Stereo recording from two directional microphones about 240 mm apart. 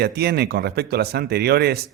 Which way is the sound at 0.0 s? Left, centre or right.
Right.